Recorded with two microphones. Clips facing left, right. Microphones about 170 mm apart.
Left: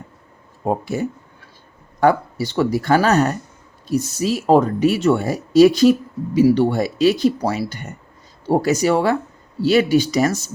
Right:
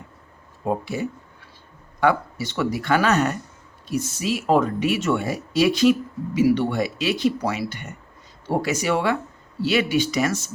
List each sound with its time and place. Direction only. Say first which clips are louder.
0.6 s speech: left 4 dB; 45° left (ahead or behind)